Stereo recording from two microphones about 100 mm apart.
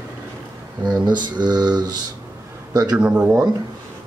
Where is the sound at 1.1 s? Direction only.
45° right (ahead or behind).